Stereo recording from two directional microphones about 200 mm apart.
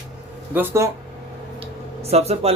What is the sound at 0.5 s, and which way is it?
Speech, 10° right (ahead or behind).